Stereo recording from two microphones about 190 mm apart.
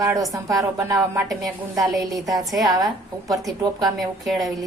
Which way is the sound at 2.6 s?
20° right (ahead or behind).